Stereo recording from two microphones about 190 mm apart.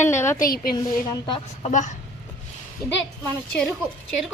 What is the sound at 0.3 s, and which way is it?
Speech, 50° left (ahead or behind).